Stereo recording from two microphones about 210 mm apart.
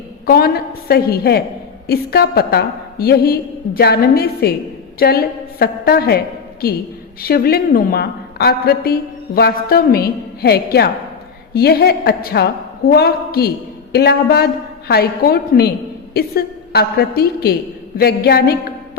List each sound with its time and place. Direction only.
0.3 s a woman's voice: 45° left (ahead or behind)
7.2 s a woman's voice: 45° left (ahead or behind)